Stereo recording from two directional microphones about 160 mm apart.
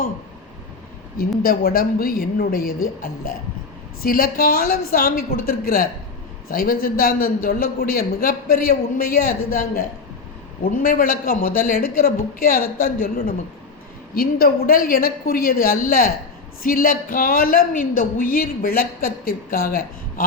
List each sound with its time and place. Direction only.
1.4 s a woman's voice: 65° left (ahead or behind)